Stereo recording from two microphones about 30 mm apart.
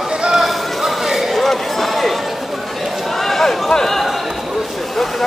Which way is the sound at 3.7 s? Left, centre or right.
Centre.